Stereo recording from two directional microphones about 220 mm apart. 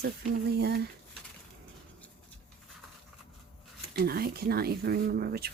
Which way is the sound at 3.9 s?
45° right (ahead or behind).